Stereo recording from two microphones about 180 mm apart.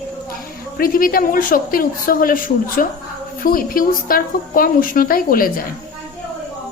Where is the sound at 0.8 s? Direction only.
50° left (ahead or behind).